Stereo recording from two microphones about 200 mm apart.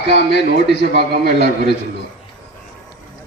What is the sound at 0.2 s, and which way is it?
A man's voice, 60° right (ahead or behind).